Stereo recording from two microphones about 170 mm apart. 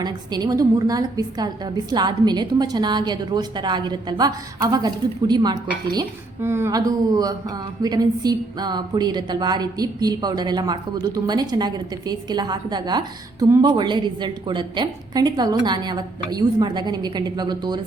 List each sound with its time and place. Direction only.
0.0 s a woman's voice: 25° right (ahead or behind)